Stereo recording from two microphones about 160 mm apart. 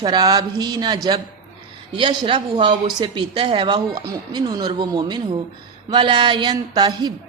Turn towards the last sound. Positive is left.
turn(degrees=-25)  # may be behind; listen again after turning